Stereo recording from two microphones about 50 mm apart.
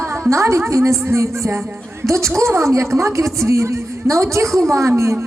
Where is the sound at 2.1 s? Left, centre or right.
Right.